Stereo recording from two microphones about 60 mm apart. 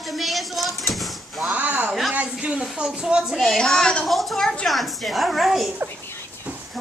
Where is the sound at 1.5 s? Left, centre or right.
Right.